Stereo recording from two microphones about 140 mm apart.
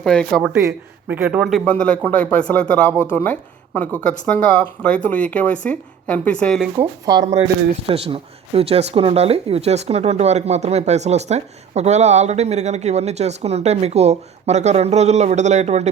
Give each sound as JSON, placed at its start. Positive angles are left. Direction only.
{"t": 0.0, "sound": "speech", "side_deg": 5}
{"t": 1.0, "sound": "a man's voice", "side_deg": -10}
{"t": 1.6, "sound": "speech", "side_deg": 10}
{"t": 6.7, "sound": "speech", "side_deg": -25}
{"t": 7.9, "sound": "speech", "side_deg": -45}